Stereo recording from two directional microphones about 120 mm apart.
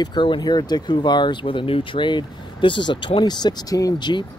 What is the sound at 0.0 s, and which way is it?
Speech, 40° left (ahead or behind).